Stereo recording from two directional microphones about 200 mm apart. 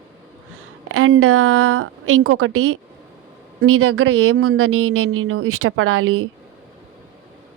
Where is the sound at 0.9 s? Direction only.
90° right.